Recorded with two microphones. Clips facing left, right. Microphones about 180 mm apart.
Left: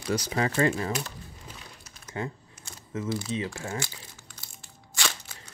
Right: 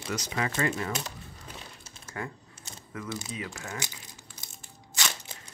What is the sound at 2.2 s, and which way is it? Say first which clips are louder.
Speech: left 4 dB; 25° left (ahead or behind).